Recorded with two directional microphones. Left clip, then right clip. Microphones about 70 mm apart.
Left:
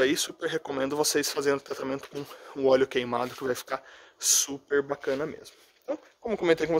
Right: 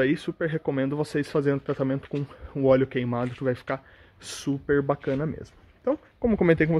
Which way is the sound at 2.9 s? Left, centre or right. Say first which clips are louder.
Left 1 dB; centre.